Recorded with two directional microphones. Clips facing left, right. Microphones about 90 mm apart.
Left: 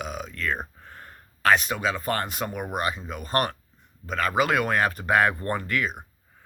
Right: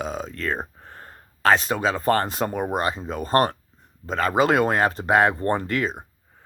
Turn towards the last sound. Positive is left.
turn(degrees=-30)  # may be behind; listen again after turning